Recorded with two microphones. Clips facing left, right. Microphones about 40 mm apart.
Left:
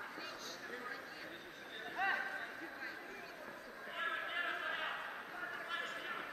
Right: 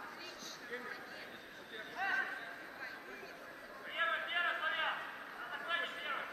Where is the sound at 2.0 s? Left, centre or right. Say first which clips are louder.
Left 1 dB; centre.